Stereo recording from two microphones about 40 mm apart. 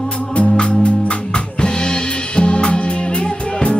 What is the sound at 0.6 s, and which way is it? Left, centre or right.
Drum kit, left.